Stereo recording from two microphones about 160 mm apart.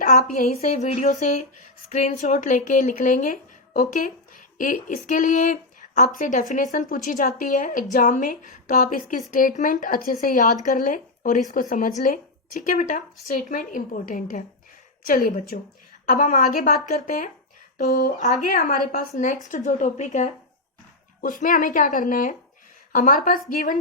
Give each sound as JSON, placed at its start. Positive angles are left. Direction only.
{"t": 0.0, "sound": "a woman's voice", "side_deg": 55}
{"t": 17.7, "sound": "a woman's voice", "side_deg": 50}
{"t": 18.4, "sound": "a woman's voice", "side_deg": 60}